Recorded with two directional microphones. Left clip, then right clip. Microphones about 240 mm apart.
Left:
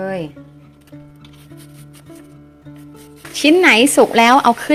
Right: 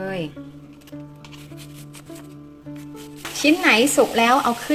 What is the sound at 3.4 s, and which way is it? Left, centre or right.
Speech, left.